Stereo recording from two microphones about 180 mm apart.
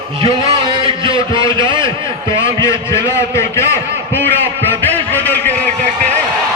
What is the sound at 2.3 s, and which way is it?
A man's voice, 15° left (ahead or behind).